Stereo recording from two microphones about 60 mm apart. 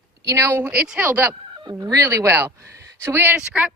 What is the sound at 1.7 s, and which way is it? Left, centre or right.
Speech, right.